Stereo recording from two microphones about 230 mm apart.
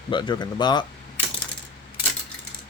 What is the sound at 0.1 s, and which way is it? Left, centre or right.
Speech, centre.